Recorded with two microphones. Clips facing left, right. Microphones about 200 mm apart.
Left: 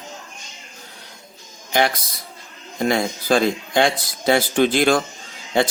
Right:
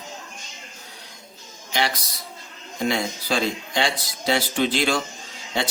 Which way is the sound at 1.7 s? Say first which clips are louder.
Left 6 dB; 50° left (ahead or behind).